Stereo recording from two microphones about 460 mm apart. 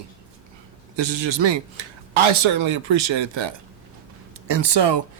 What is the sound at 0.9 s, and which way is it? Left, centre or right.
Speech, right.